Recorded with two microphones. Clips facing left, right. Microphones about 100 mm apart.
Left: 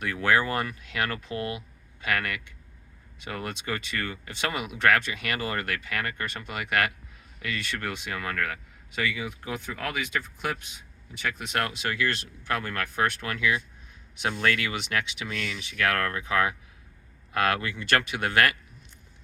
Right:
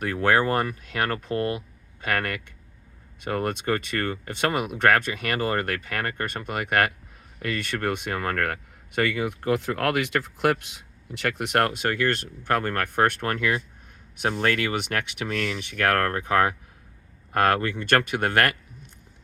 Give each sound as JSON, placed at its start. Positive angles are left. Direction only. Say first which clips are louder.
{"t": 0.0, "sound": "speech", "louder": "right 3 dB", "side_deg": -45}